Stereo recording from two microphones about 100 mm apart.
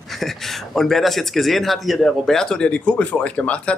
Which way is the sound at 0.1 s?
Centre (ahead or behind).